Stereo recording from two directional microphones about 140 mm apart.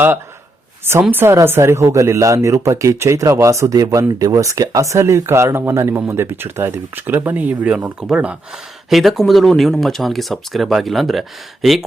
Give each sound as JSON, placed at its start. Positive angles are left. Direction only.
{"t": 1.1, "sound": "speech", "side_deg": -15}